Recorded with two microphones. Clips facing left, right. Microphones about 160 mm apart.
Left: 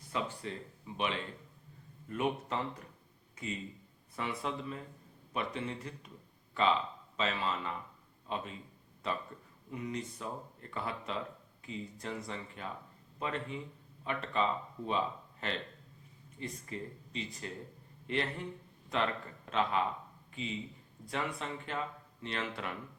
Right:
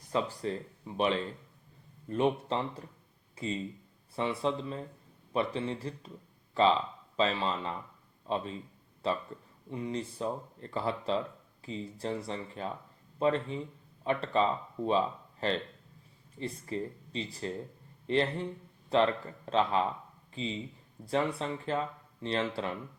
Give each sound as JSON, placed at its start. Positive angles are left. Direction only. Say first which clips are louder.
{"t": 0.1, "sound": "a man's voice", "louder": "right 6 dB", "side_deg": -35}